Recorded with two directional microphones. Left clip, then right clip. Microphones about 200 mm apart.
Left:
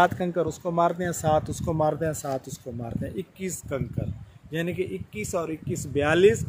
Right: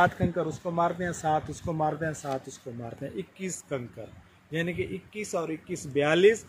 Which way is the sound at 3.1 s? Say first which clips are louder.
Left 3 dB; 50° left (ahead or behind).